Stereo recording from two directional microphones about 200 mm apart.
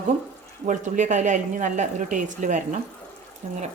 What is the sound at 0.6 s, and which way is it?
A woman's voice, 35° right (ahead or behind).